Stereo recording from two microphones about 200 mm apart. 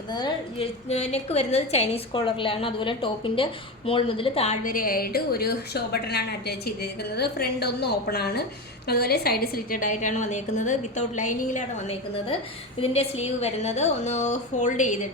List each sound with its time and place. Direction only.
0.1 s a woman's voice: 20° left (ahead or behind)
0.9 s a woman's voice: 30° left (ahead or behind)